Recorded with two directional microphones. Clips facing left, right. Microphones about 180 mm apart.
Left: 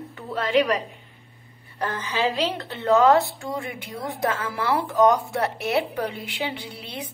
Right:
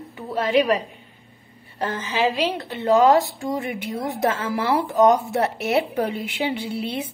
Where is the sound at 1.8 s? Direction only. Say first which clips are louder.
Right 2 dB; 20° right (ahead or behind).